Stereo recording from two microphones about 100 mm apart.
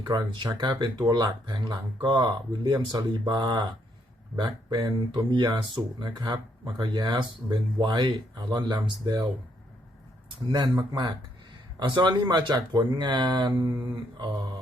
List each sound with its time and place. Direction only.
0.0 s speech: 45° right (ahead or behind)
11.8 s speech: 50° right (ahead or behind)